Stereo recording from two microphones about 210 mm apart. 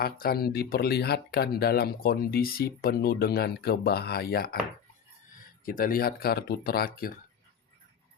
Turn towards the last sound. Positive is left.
turn(degrees=45)  # may be behind; listen again after turning